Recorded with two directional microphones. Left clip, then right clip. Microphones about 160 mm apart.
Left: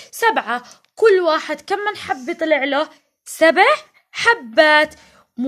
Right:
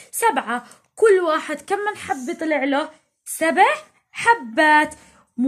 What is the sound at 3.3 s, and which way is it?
A woman's voice, 35° left (ahead or behind).